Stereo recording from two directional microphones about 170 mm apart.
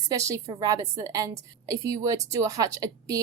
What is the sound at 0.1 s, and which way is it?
A woman's voice, 20° right (ahead or behind).